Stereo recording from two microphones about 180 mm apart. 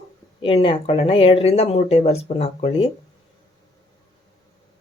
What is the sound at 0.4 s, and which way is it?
Speech, 30° left (ahead or behind).